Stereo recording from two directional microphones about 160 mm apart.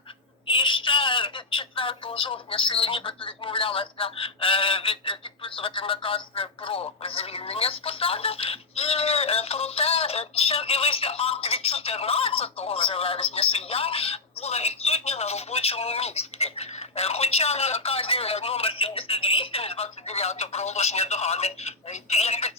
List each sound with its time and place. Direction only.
0.4 s a woman's voice: 35° left (ahead or behind)